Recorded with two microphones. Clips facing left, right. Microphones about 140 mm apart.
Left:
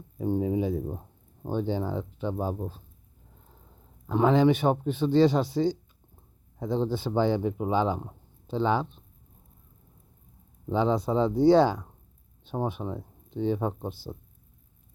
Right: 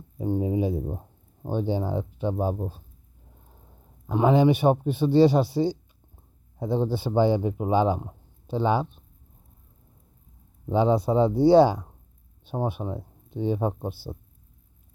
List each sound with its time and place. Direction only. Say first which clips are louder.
0.3 s speech: right 2 dB; 20° right (ahead or behind)
4.1 s speech: right 1 dB; 10° right (ahead or behind)
10.7 s speech: right 3 dB; 15° right (ahead or behind)